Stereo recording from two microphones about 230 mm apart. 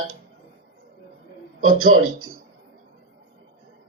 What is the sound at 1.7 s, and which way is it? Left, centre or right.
Speech, right.